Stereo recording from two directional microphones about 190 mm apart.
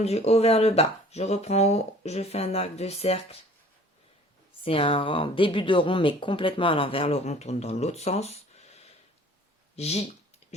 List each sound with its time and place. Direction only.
0.0 s speech: 35° left (ahead or behind)
4.6 s speech: 30° left (ahead or behind)